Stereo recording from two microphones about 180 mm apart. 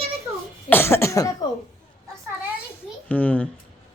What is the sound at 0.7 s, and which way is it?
Cough, 15° left (ahead or behind).